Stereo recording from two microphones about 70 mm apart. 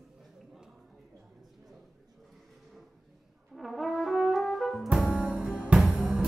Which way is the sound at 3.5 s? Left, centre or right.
Centre.